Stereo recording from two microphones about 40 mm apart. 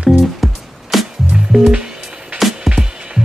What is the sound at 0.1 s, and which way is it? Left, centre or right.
Music, centre.